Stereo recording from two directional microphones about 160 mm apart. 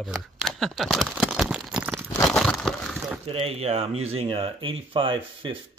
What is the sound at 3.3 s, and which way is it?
Speech, 40° right (ahead or behind).